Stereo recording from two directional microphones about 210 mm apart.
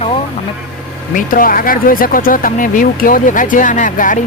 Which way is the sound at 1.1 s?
40° left (ahead or behind).